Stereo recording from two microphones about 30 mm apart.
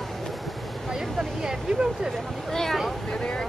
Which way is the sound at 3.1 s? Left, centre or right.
Left.